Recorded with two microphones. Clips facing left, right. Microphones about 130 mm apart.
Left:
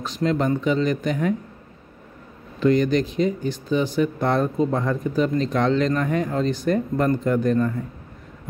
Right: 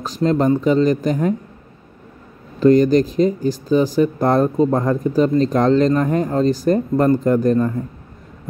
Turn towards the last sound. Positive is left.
turn(degrees=-35)  # may be behind; listen again after turning